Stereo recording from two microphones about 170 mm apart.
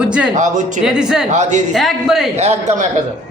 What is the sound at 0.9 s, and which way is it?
Speech, 5° right (ahead or behind).